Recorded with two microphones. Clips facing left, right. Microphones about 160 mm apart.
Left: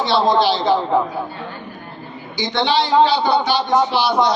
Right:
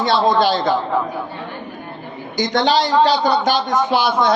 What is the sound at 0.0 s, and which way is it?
Speech, 50° right (ahead or behind).